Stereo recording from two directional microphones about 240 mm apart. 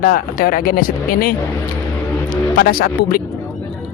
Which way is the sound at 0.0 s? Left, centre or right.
Left.